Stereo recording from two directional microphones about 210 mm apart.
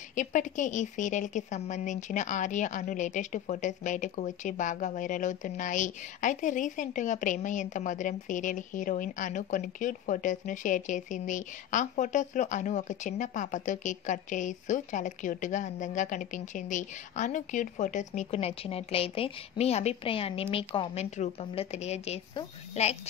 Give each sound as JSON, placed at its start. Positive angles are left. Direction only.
{"t": 0.1, "sound": "a woman's voice", "side_deg": 35}